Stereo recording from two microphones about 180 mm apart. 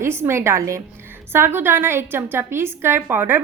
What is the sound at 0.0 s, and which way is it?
A woman's voice, 15° right (ahead or behind).